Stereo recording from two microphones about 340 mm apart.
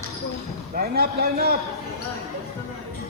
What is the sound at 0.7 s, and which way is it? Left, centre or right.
Speech, right.